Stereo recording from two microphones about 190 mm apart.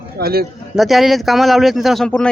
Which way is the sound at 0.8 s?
Centre (ahead or behind).